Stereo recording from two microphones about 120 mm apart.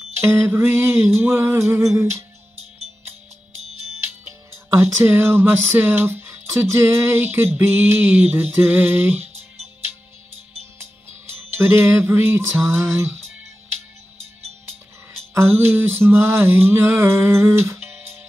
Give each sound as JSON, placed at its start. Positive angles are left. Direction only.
{"t": 0.2, "sound": "speech", "side_deg": -20}
{"t": 4.5, "sound": "speech", "side_deg": -20}
{"t": 11.3, "sound": "speech", "side_deg": -20}
{"t": 15.3, "sound": "speech", "side_deg": -20}